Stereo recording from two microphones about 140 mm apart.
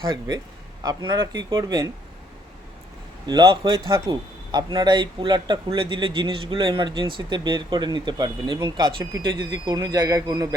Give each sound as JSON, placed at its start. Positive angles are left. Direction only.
{"t": 0.8, "sound": "speech", "side_deg": -30}
{"t": 3.2, "sound": "speech", "side_deg": -30}